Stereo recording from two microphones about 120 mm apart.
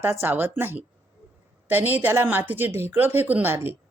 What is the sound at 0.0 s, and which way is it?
Speech, 20° right (ahead or behind).